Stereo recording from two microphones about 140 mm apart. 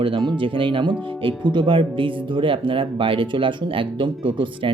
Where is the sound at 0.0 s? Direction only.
35° right (ahead or behind).